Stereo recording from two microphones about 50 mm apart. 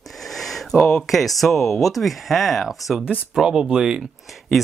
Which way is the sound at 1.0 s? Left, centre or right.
Centre.